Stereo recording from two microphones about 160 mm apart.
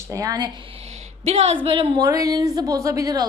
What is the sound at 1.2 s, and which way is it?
Speech, 40° right (ahead or behind).